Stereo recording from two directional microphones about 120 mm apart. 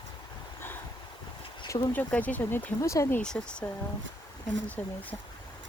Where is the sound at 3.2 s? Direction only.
5° left (ahead or behind).